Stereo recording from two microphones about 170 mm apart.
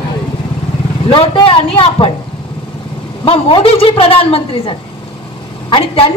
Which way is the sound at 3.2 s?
30° left (ahead or behind).